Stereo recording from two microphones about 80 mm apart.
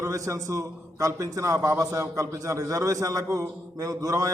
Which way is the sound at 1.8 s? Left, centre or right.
Right.